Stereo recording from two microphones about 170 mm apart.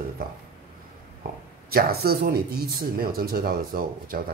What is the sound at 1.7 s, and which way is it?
Speech, 65° right (ahead or behind).